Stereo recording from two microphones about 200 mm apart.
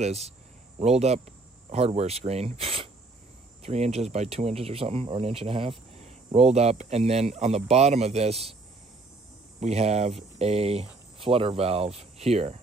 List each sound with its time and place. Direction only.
0.0 s speech: 35° right (ahead or behind)
9.6 s speech: 35° right (ahead or behind)